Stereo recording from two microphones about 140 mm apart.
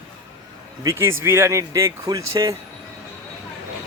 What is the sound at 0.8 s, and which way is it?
Speech, 20° right (ahead or behind).